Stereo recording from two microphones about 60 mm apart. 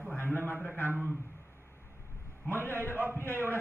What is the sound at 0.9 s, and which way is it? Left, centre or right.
Speech, right.